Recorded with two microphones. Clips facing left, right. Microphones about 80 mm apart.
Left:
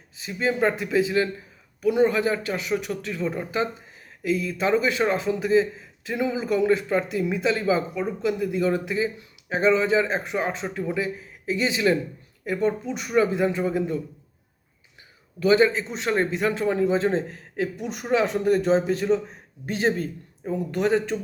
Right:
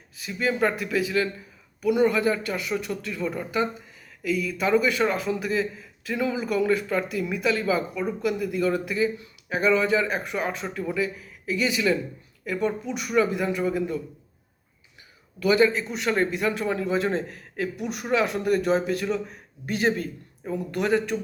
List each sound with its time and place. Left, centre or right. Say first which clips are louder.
0.2 s speech: left 1 dB; left
15.4 s speech: left 2 dB; left